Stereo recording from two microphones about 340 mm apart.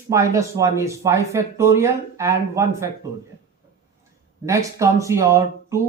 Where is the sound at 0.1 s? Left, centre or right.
Centre.